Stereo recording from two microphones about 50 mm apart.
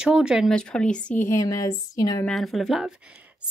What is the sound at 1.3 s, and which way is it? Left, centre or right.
Speech, left.